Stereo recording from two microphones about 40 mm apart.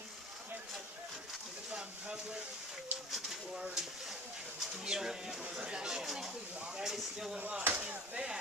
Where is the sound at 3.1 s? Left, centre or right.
Centre.